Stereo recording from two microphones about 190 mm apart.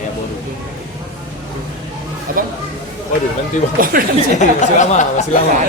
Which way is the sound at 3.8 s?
45° right (ahead or behind).